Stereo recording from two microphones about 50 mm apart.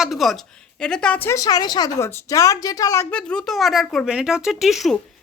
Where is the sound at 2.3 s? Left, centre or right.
Left.